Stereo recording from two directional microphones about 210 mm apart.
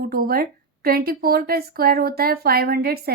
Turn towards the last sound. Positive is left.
turn(degrees=-45)  # may be behind; listen again after turning